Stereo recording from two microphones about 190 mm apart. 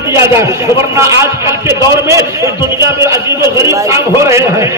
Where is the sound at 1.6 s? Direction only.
15° right (ahead or behind).